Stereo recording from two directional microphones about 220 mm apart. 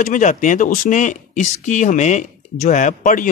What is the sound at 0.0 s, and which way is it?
Speech, 35° left (ahead or behind).